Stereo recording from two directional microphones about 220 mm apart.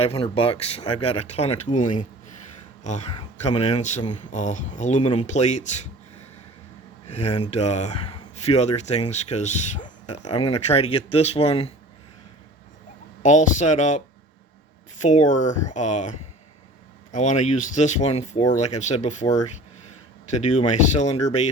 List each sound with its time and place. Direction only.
0.0 s speech: 25° left (ahead or behind)
3.2 s speech: 30° left (ahead or behind)
7.1 s speech: 30° left (ahead or behind)
13.2 s speech: 35° left (ahead or behind)
15.0 s speech: 35° left (ahead or behind)
20.4 s speech: 35° left (ahead or behind)